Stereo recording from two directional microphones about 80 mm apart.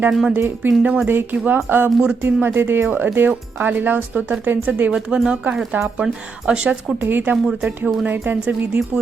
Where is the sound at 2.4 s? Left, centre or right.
Right.